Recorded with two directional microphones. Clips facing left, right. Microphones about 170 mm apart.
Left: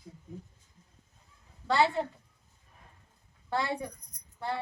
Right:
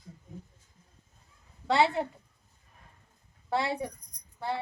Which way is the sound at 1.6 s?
25° right (ahead or behind).